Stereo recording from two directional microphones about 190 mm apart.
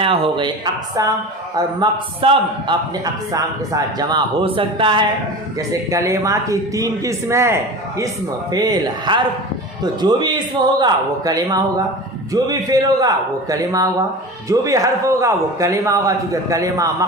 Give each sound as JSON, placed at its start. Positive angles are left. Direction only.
{"t": 0.0, "sound": "a man's voice", "side_deg": -25}